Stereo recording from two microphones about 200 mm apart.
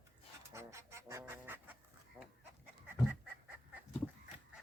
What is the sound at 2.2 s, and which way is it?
Chicken, 5° right (ahead or behind).